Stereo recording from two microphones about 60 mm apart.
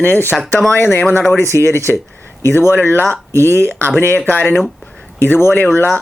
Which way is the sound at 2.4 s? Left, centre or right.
Left.